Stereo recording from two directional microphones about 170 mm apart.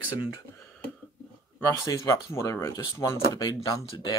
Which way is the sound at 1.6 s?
15° left (ahead or behind).